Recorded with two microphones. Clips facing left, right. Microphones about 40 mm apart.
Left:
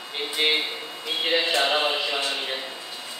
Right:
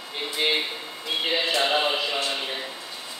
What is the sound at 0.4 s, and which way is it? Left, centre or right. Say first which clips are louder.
A man's voice: left 1 dB; centre.